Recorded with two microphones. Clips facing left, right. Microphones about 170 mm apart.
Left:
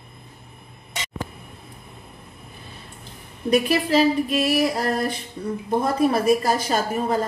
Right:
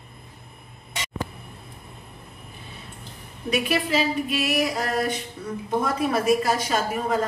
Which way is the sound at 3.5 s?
35° left (ahead or behind).